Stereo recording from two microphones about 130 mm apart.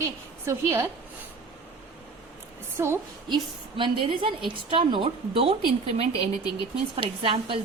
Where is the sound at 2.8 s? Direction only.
20° right (ahead or behind).